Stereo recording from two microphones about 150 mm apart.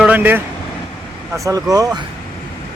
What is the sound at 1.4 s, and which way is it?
Speech, 25° right (ahead or behind).